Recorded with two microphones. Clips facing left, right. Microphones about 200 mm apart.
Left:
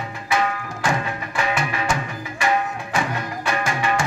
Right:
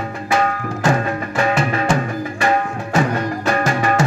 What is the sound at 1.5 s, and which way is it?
Music, 30° right (ahead or behind).